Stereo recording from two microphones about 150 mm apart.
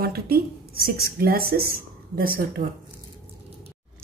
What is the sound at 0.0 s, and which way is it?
Speech, 90° right.